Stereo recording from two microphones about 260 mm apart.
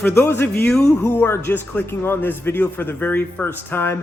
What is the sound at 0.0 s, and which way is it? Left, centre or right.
Speech, centre.